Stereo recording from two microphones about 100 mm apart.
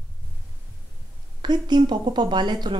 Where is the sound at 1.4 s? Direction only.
45° right (ahead or behind).